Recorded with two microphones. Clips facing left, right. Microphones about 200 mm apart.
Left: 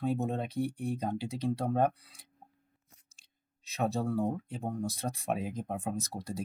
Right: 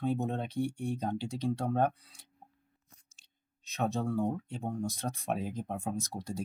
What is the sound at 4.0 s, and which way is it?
Speech, 5° left (ahead or behind).